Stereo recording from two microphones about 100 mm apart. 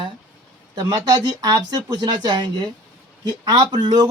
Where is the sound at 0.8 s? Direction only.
40° right (ahead or behind).